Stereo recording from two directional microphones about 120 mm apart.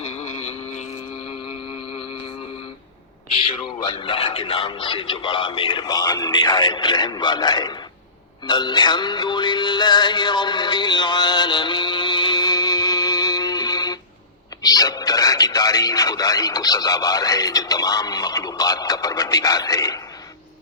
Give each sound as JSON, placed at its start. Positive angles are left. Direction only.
{"t": 0.0, "sound": "a sound", "side_deg": 70}
{"t": 3.3, "sound": "speech", "side_deg": 45}
{"t": 8.4, "sound": "music", "side_deg": 40}
{"t": 14.6, "sound": "speech", "side_deg": 30}